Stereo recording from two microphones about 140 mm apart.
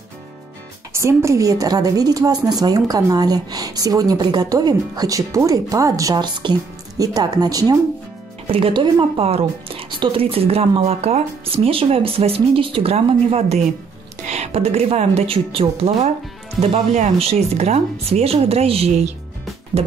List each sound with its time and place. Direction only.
0.9 s a woman's voice: 20° right (ahead or behind)
8.5 s a woman's voice: 40° right (ahead or behind)